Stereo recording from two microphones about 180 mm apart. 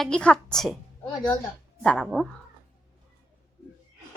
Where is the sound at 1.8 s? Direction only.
Centre (ahead or behind).